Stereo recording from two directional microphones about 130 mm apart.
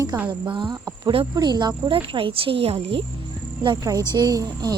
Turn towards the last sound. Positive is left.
turn(degrees=-30)  # may be behind; listen again after turning